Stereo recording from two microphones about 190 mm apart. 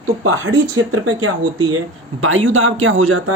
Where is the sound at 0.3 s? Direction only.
90° right.